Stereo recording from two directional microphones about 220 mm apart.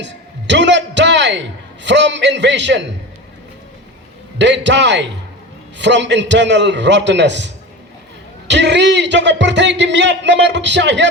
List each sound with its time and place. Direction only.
0.0 s a man's voice: 55° right (ahead or behind)
4.4 s speech: 55° right (ahead or behind)